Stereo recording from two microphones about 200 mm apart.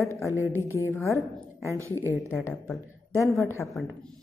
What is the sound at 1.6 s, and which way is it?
Speech, 15° right (ahead or behind).